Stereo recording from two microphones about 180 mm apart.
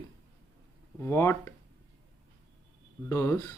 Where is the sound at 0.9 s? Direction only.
15° left (ahead or behind).